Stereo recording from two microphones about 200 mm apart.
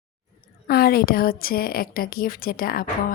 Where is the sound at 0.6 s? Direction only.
50° left (ahead or behind).